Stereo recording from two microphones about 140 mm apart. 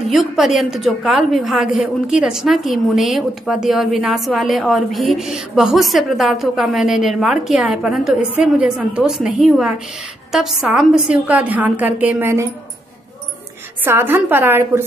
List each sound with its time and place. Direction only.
0.1 s a woman's voice: centre (ahead or behind); by 12.4 s 15° right (ahead or behind)
13.8 s a woman's voice: 15° right (ahead or behind)